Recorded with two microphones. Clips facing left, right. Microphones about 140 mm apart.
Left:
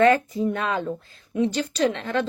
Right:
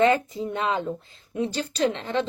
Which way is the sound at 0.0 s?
20° right (ahead or behind).